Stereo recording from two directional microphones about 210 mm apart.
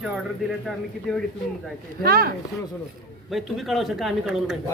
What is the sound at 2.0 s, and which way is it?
Speech, 45° right (ahead or behind).